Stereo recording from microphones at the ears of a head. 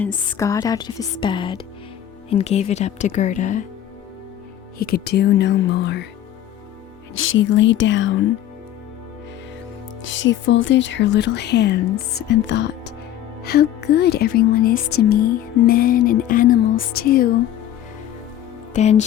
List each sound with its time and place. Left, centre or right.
0.3 s speech: left
4.8 s speech: left
7.2 s speech: left
10.0 s speech: left
18.7 s speech: left